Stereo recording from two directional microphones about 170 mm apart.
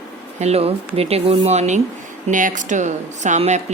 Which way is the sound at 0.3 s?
40° right (ahead or behind).